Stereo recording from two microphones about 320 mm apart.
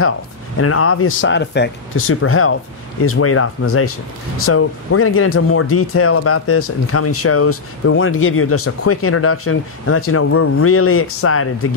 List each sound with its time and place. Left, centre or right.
0.6 s speech: left